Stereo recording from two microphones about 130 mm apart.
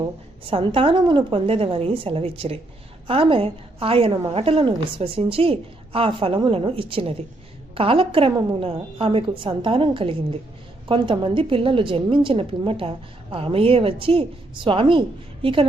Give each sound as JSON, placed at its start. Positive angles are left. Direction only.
{"t": 0.5, "sound": "a woman's voice", "side_deg": -45}